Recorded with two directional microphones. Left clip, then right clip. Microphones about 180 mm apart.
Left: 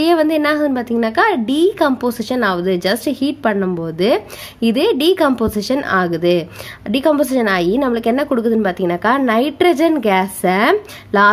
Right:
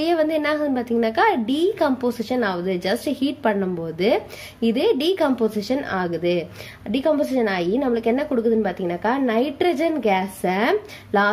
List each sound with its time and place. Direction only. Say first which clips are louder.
0.0 s a woman's voice: left 6 dB; 25° left (ahead or behind)